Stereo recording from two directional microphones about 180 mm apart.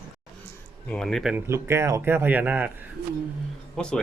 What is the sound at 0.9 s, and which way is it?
Speech, 5° left (ahead or behind).